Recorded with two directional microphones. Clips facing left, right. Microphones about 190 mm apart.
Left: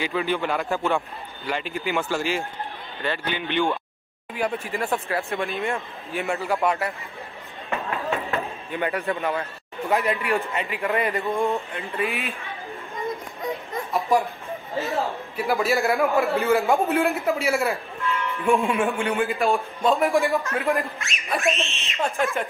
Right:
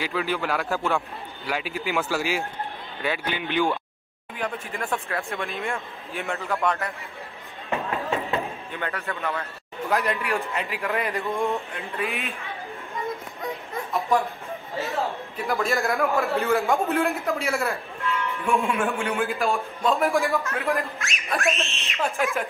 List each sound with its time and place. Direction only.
0.0 s a man's voice: centre (ahead or behind)
4.4 s a man's voice: 10° left (ahead or behind)
7.7 s chop: 20° right (ahead or behind)
8.7 s a man's voice: 15° left (ahead or behind)
9.8 s a man's voice: centre (ahead or behind)
14.8 s a man's voice: 5° left (ahead or behind)